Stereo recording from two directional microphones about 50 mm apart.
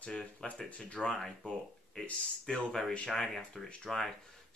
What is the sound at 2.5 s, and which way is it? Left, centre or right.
Speech, centre.